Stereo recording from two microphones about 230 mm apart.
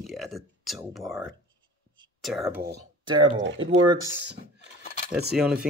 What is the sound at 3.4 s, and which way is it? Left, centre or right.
Speech, right.